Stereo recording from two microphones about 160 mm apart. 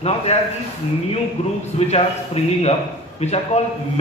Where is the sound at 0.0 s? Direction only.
40° left (ahead or behind).